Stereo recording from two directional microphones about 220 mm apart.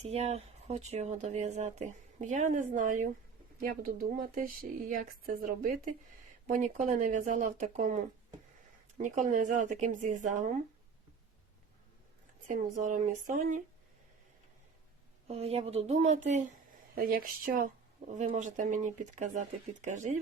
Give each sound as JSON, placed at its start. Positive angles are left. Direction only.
{"t": 0.0, "sound": "speech", "side_deg": -30}
{"t": 12.5, "sound": "speech", "side_deg": -35}
{"t": 15.3, "sound": "speech", "side_deg": -25}